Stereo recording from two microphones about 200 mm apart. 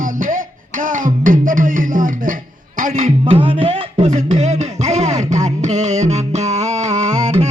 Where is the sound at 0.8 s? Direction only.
40° right (ahead or behind).